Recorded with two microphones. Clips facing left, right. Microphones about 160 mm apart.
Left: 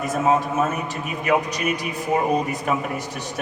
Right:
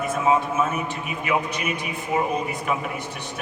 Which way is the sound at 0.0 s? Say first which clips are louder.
Left 1 dB; 40° left (ahead or behind).